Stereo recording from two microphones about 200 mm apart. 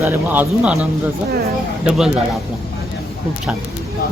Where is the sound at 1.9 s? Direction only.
Centre (ahead or behind).